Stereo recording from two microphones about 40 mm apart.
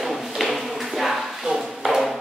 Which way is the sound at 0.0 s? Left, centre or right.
Centre.